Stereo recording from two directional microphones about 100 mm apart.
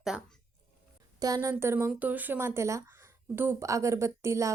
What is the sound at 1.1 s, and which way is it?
A woman's voice, 40° right (ahead or behind).